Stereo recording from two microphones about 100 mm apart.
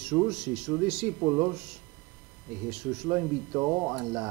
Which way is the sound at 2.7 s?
10° right (ahead or behind).